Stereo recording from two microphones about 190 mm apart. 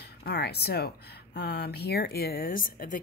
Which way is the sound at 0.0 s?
55° left (ahead or behind).